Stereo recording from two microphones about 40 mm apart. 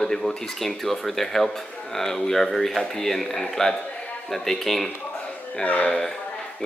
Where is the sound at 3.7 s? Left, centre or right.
Left.